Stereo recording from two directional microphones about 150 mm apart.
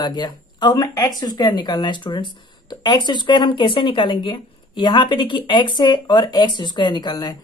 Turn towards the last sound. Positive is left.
turn(degrees=25)  # may be behind; listen again after turning